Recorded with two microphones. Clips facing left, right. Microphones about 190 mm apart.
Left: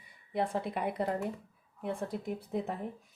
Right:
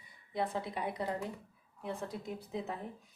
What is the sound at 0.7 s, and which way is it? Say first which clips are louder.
Speech: left 5 dB; 60° left (ahead or behind).